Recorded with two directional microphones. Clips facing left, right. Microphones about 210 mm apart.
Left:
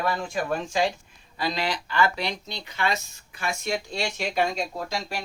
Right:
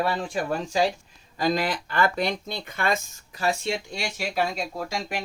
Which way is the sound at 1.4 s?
50° right (ahead or behind).